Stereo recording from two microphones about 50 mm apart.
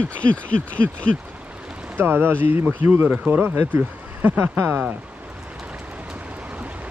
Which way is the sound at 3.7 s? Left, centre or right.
Right.